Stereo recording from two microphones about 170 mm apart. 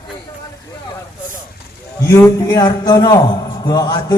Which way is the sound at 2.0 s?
20° left (ahead or behind).